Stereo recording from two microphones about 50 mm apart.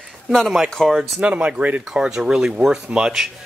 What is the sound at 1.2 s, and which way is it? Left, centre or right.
Speech, right.